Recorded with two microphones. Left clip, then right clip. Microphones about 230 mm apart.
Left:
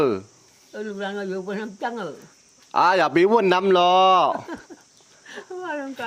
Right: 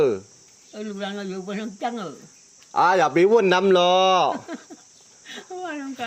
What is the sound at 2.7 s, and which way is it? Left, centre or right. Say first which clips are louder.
Speech: even; left.